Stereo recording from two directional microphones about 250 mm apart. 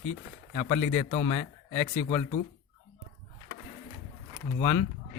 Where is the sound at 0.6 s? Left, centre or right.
Left.